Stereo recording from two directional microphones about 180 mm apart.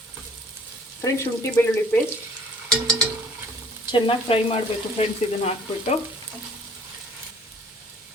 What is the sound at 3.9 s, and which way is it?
Frying, 30° left (ahead or behind).